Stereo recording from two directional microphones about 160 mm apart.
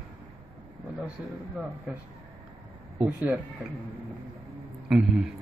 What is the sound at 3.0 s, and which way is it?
Speech, 10° right (ahead or behind).